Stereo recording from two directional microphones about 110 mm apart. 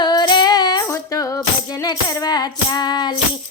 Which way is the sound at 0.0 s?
40° left (ahead or behind).